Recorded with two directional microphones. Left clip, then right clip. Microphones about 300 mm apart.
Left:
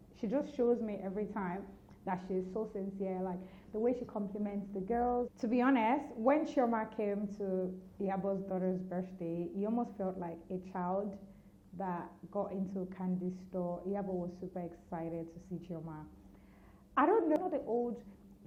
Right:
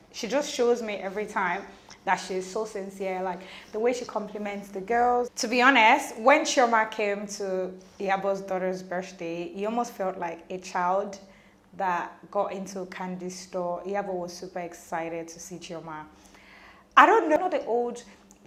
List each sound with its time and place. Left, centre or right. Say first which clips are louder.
0.1 s a woman's voice: right 9 dB; centre
13.6 s a woman's voice: right 9 dB; centre